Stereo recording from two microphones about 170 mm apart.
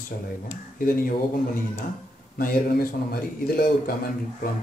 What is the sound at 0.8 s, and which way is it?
A man's voice, 60° left (ahead or behind).